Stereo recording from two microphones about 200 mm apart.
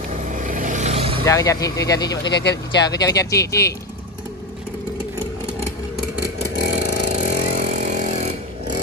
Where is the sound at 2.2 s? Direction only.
60° left (ahead or behind).